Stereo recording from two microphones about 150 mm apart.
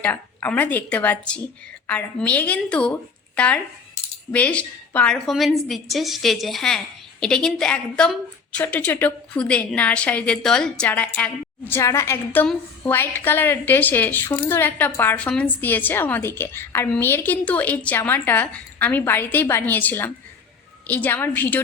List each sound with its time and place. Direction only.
0.0 s a woman's voice: 10° left (ahead or behind)